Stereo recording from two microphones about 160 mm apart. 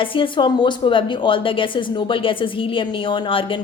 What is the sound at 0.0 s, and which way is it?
A woman's voice, 30° left (ahead or behind).